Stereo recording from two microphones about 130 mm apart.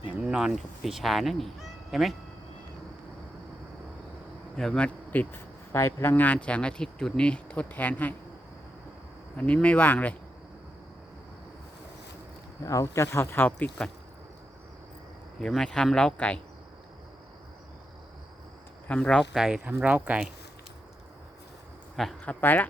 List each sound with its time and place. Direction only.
0.2 s speech: 5° right (ahead or behind)
4.5 s speech: 5° left (ahead or behind)
9.4 s speech: 10° left (ahead or behind)
12.6 s speech: 25° left (ahead or behind)
15.4 s speech: 5° left (ahead or behind)
18.9 s speech: 5° left (ahead or behind)
21.9 s speech: 5° left (ahead or behind)